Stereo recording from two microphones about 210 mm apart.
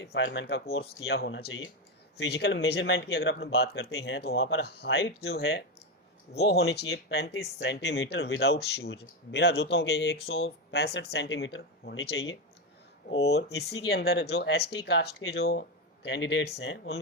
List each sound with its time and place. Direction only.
0.0 s speech: 55° left (ahead or behind)
0.8 s speech: 65° left (ahead or behind); by 9.6 s 50° left (ahead or behind)
9.7 s speech: 65° left (ahead or behind)
13.1 s speech: 55° left (ahead or behind)